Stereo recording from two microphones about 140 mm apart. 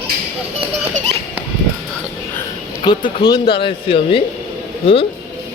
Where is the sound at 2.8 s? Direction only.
35° left (ahead or behind).